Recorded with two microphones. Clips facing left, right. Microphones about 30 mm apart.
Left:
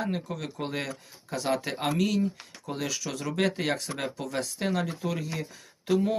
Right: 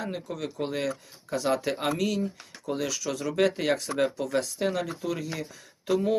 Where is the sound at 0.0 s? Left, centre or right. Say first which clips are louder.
Left 1 dB; centre.